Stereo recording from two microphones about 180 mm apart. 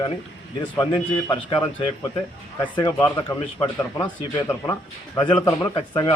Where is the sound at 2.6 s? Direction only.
25° left (ahead or behind).